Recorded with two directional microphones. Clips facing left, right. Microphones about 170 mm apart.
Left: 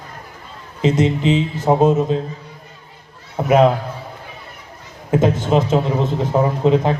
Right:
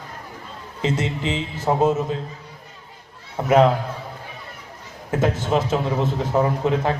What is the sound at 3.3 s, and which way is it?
Speech, 15° left (ahead or behind).